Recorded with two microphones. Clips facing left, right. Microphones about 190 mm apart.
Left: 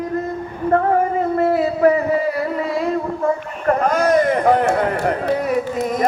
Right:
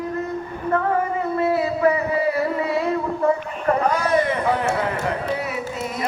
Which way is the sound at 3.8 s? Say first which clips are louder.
Left 7 dB; 45° left (ahead or behind).